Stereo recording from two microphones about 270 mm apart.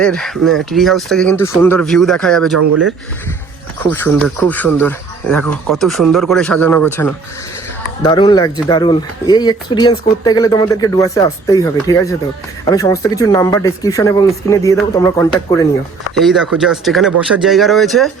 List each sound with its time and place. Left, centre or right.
0.0 s speech: centre
2.6 s speech: right
3.8 s speech: centre
16.1 s speech: centre